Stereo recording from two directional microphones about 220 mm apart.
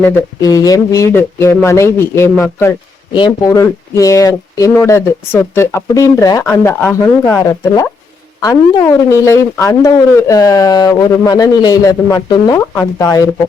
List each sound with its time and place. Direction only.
0.0 s speech: 10° left (ahead or behind)